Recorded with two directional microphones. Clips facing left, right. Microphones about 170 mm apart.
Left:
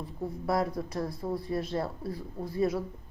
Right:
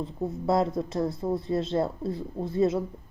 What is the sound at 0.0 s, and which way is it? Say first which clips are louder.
A woman's voice: right 5 dB; 25° right (ahead or behind).